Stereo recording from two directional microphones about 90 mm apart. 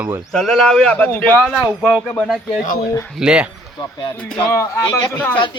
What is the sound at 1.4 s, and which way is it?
Speech, centre (ahead or behind).